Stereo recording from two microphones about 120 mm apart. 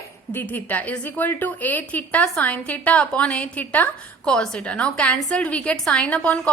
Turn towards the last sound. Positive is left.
turn(degrees=10)  # may be behind; listen again after turning